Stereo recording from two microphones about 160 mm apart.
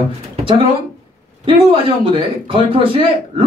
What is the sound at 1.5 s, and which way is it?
Speech, 35° right (ahead or behind).